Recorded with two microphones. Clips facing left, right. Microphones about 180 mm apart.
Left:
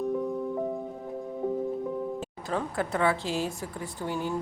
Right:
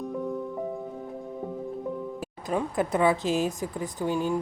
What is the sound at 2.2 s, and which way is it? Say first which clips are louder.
Speech: right 3 dB; 10° right (ahead or behind).